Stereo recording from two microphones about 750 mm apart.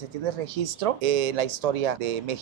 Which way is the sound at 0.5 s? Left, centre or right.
Right.